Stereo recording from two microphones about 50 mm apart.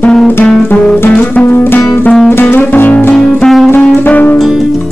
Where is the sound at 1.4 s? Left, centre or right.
Left.